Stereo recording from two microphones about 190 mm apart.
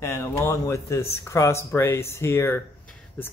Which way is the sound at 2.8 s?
10° left (ahead or behind).